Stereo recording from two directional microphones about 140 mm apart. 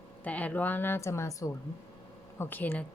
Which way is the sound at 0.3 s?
10° left (ahead or behind).